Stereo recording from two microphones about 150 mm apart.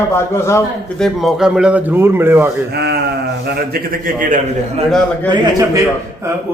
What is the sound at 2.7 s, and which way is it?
A man's voice, 90° right.